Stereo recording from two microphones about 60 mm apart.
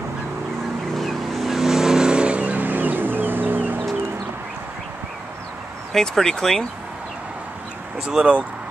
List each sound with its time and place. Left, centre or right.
0.9 s vehicle: centre; by 3.8 s right
5.9 s speech: centre
8.0 s speech: centre